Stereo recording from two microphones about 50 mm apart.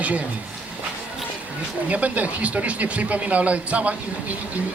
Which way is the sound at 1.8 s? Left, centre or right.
Right.